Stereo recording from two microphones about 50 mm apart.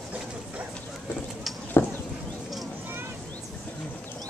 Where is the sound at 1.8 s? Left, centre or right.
Left.